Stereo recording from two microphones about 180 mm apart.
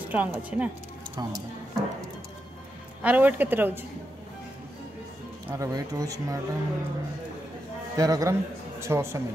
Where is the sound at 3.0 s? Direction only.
10° right (ahead or behind).